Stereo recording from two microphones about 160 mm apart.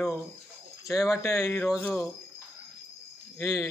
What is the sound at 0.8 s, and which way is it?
Speech, 20° left (ahead or behind).